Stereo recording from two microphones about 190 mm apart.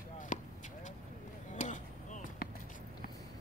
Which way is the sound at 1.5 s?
40° left (ahead or behind).